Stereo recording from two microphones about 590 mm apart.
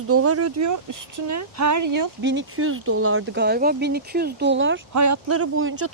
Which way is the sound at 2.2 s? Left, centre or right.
Centre.